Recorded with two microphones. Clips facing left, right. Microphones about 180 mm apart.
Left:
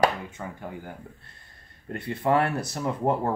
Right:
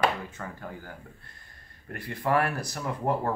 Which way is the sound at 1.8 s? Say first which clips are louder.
Left 4 dB; 25° left (ahead or behind).